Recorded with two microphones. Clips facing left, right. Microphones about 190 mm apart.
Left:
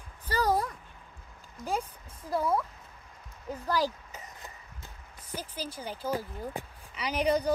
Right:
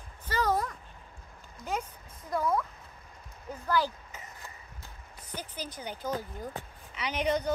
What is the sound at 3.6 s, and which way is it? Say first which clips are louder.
Speech: even; 35° left (ahead or behind).